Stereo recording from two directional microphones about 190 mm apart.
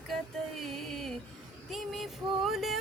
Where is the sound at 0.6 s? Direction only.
Centre (ahead or behind).